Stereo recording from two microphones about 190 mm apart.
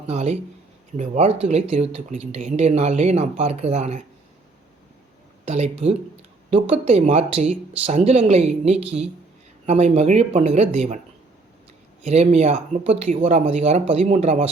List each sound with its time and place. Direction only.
0.1 s speech: 35° right (ahead or behind)
5.5 s speech: 35° right (ahead or behind)
12.0 s speech: 35° right (ahead or behind)